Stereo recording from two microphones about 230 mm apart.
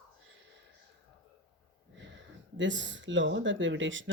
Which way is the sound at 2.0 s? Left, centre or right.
Right.